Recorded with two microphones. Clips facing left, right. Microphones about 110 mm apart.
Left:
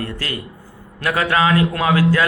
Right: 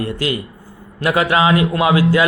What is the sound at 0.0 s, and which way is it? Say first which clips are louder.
A man's voice: right 6 dB; 15° right (ahead or behind).